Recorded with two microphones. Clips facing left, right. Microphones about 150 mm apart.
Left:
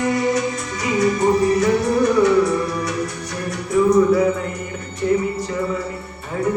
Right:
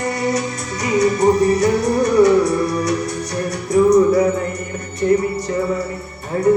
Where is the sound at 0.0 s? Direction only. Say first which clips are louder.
Left 1 dB; 35° right (ahead or behind).